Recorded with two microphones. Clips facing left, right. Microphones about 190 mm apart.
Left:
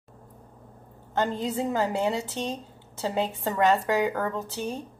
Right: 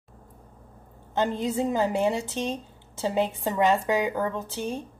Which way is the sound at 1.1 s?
15° right (ahead or behind).